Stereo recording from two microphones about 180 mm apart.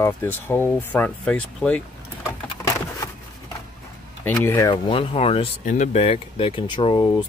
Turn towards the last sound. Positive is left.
turn(degrees=25)  # may be behind; listen again after turning